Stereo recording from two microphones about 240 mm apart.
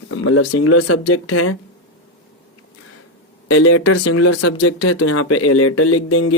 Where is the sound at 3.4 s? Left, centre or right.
Left.